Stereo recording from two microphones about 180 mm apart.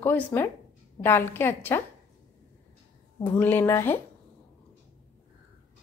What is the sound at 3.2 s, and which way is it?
Speech, 10° left (ahead or behind).